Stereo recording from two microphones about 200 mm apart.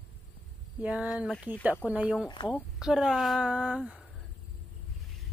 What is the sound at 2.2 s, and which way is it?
Speech, 20° left (ahead or behind).